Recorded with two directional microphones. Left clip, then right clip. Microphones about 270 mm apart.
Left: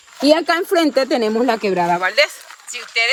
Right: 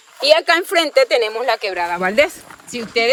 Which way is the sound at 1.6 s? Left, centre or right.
Centre.